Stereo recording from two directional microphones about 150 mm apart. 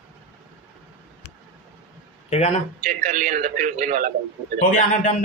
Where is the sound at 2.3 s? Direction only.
45° left (ahead or behind).